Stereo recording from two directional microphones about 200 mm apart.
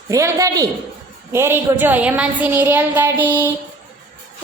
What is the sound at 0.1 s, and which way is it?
A woman's voice, 15° right (ahead or behind).